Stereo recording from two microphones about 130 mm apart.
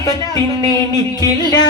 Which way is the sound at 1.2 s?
30° left (ahead or behind).